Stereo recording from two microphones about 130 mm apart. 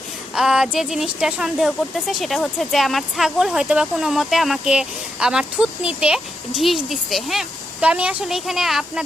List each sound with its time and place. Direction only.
0.3 s speech: 5° right (ahead or behind)